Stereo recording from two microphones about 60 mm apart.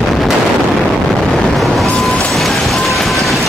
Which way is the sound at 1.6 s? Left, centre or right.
Centre.